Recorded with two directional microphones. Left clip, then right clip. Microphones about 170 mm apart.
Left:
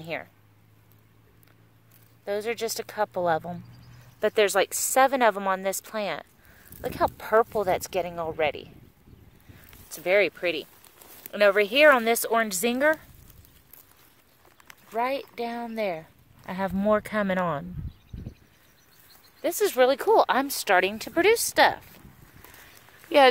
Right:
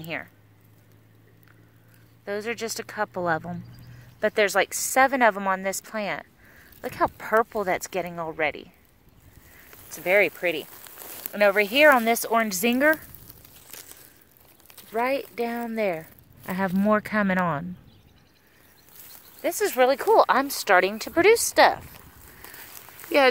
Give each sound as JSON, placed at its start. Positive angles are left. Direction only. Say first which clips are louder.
{"t": 0.0, "sound": "speech", "louder": "right 1 dB", "side_deg": 15}
{"t": 2.2, "sound": "speech", "louder": "left 1 dB", "side_deg": 15}
{"t": 9.8, "sound": "speech", "louder": "right 2 dB", "side_deg": 20}
{"t": 10.8, "sound": "a sound", "louder": "right 7 dB", "side_deg": -55}
{"t": 11.3, "sound": "speech", "louder": "even", "side_deg": 20}
{"t": 14.7, "sound": "speech", "louder": "right 2 dB", "side_deg": 10}
{"t": 19.4, "sound": "speech", "louder": "even", "side_deg": 15}